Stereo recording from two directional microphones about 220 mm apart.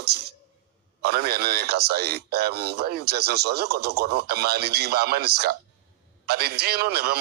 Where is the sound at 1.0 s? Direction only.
45° right (ahead or behind).